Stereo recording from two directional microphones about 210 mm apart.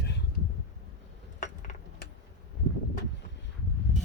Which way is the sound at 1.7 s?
35° left (ahead or behind).